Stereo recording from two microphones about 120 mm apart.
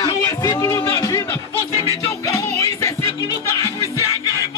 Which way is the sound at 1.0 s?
25° left (ahead or behind).